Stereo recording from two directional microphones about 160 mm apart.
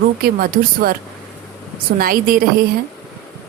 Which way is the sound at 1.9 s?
65° right (ahead or behind).